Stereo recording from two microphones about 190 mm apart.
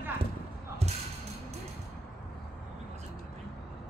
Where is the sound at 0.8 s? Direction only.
35° right (ahead or behind).